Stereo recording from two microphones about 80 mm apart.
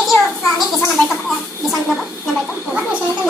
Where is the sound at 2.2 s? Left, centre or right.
Centre.